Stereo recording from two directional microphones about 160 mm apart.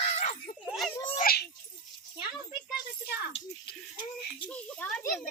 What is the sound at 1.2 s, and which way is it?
Babbling, 80° left.